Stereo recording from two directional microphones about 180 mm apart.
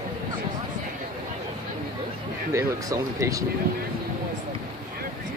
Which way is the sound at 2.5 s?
15° right (ahead or behind).